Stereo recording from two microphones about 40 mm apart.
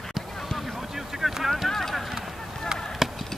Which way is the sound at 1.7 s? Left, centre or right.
Centre.